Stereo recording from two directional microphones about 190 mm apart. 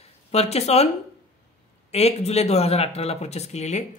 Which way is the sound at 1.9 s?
35° left (ahead or behind).